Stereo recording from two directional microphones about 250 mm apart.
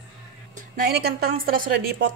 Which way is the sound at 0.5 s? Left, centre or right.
Right.